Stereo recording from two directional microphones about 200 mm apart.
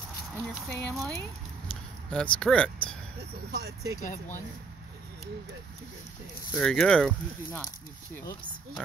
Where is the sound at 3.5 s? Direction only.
55° right (ahead or behind).